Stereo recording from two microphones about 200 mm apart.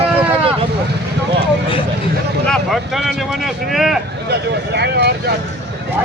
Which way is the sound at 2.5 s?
Centre (ahead or behind).